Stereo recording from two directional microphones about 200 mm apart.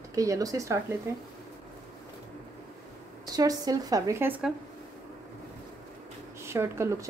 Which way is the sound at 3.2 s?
20° right (ahead or behind).